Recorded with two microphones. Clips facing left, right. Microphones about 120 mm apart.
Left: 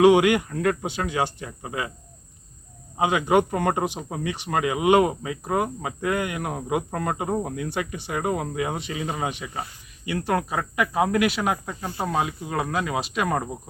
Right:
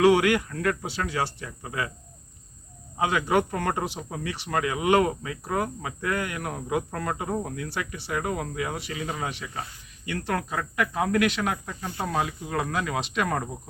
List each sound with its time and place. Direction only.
0.0 s speech: 20° left (ahead or behind)
3.0 s speech: 20° left (ahead or behind)